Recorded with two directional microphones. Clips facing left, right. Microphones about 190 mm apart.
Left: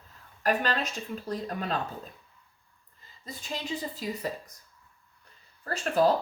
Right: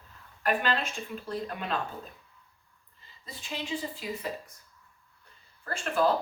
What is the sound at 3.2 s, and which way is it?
Speech, 40° left (ahead or behind).